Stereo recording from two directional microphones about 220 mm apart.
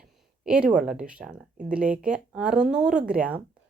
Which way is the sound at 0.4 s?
5° right (ahead or behind).